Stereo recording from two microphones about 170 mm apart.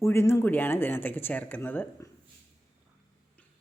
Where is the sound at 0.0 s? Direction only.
15° left (ahead or behind).